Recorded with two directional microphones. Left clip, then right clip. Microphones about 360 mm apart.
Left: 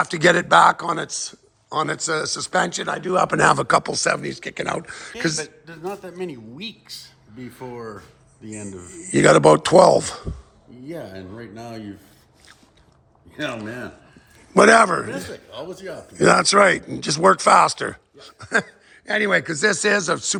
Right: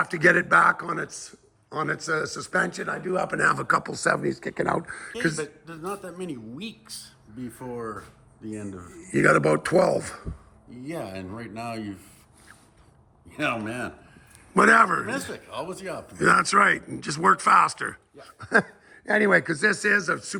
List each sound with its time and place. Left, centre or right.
0.0 s speech: centre
5.4 s speech: centre
14.5 s speech: centre
16.1 s speech: centre